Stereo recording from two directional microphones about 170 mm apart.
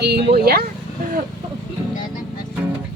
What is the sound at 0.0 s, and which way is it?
Speech, 70° right (ahead or behind).